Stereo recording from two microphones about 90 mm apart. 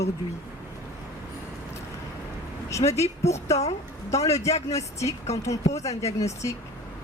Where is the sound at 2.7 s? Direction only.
35° left (ahead or behind).